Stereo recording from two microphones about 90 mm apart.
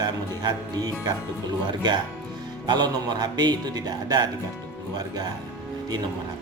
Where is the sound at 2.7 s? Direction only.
55° right (ahead or behind).